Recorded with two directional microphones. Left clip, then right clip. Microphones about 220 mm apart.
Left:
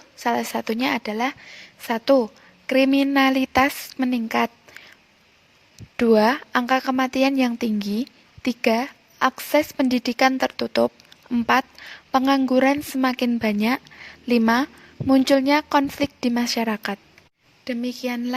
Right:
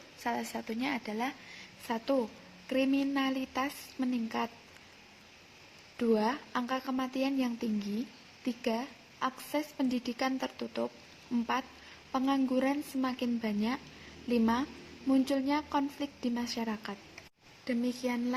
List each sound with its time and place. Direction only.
0.2 s a woman's voice: 45° left (ahead or behind)
6.0 s a woman's voice: 45° left (ahead or behind)
12.1 s a woman's voice: 45° left (ahead or behind)